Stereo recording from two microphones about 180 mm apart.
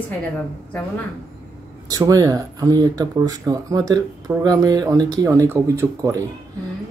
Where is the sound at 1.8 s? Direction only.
20° right (ahead or behind).